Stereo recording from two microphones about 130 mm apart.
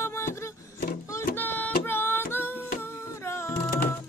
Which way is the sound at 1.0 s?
20° left (ahead or behind).